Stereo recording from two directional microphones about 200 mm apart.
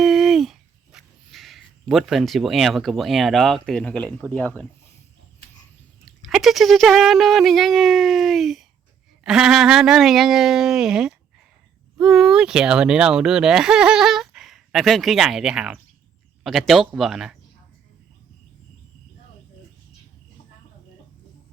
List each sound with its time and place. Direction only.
0.0 s music: centre (ahead or behind)
6.1 s speech: centre (ahead or behind)